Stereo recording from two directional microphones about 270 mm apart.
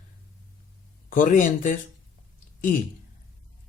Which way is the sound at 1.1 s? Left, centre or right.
Left.